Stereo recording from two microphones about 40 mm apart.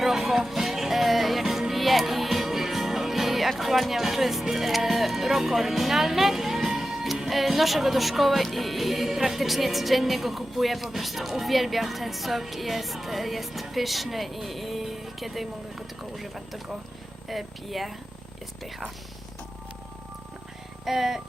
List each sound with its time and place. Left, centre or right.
0.0 s music: centre
16.0 s speech: centre
20.8 s music: centre